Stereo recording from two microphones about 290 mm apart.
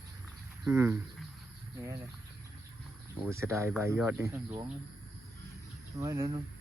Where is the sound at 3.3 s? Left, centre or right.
Centre.